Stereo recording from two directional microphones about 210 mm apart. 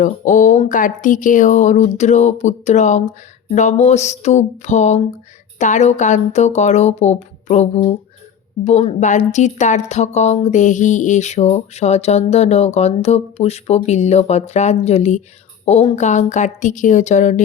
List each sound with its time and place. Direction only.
0.0 s a woman's voice: 35° left (ahead or behind)